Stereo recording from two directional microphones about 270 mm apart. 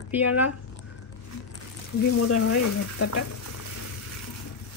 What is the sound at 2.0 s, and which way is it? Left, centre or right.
Speech, left.